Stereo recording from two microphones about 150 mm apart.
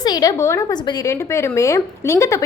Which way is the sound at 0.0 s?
25° left (ahead or behind).